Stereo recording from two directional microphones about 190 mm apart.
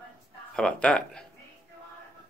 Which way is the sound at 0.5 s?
5° left (ahead or behind).